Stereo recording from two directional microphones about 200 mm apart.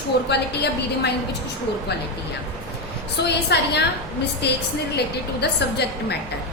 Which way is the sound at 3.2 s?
55° left (ahead or behind).